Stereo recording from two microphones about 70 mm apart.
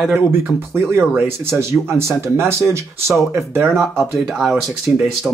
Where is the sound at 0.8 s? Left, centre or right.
Right.